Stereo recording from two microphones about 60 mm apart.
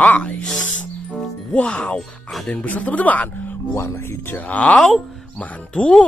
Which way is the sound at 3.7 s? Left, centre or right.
Left.